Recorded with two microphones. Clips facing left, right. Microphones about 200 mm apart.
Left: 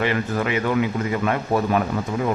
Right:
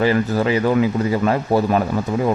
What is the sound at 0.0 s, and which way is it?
A man's voice, 35° right (ahead or behind).